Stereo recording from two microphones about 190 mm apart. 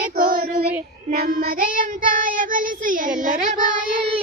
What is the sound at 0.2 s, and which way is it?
Child singing, 45° right (ahead or behind).